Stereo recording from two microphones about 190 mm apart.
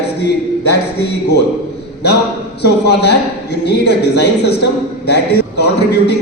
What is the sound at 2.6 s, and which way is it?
A man's voice, 60° left (ahead or behind).